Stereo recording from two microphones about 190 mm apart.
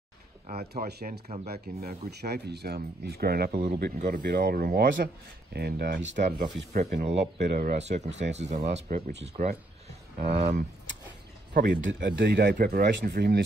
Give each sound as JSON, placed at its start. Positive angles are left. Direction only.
{"t": 0.7, "sound": "speech", "side_deg": -55}
{"t": 1.2, "sound": "speech", "side_deg": -35}
{"t": 1.5, "sound": "speech", "side_deg": -55}
{"t": 6.1, "sound": "speech", "side_deg": -40}
{"t": 11.5, "sound": "speech", "side_deg": -50}
{"t": 12.0, "sound": "speech", "side_deg": -60}